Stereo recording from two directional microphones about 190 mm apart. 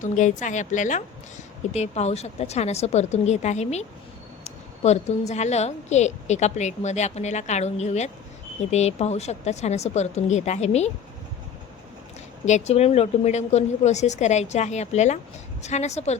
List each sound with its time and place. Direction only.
0.0 s a woman's voice: 40° left (ahead or behind)
12.5 s a woman's voice: 35° left (ahead or behind)